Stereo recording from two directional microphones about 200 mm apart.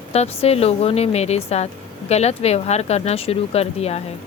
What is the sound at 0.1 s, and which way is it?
A woman's voice, 30° left (ahead or behind).